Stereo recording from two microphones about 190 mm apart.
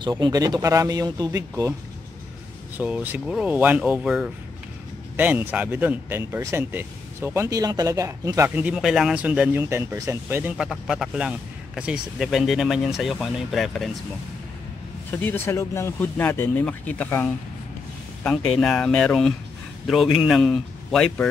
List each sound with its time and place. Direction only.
0.0 s speech: 20° right (ahead or behind)
2.8 s speech: 10° right (ahead or behind)
15.0 s a man's voice: 10° left (ahead or behind)